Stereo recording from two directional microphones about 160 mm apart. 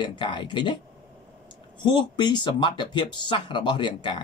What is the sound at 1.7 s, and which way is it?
Speech, 30° left (ahead or behind).